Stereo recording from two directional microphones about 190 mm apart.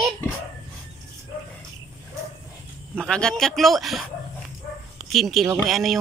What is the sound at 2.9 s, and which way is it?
Speech, 5° left (ahead or behind).